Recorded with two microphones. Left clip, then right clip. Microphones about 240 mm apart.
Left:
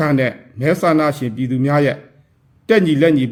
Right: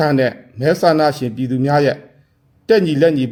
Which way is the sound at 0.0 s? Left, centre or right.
Right.